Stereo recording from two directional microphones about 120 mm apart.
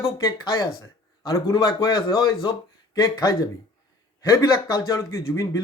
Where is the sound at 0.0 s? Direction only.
30° left (ahead or behind).